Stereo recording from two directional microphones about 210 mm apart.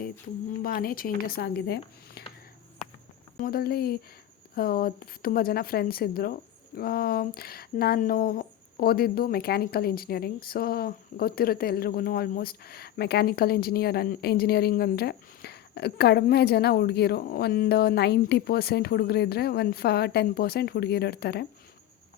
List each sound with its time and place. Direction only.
0.6 s speech: 45° left (ahead or behind)
3.4 s speech: 45° left (ahead or behind)